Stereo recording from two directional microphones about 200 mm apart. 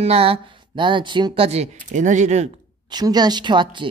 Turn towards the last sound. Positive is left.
turn(degrees=-25)  # may be behind; listen again after turning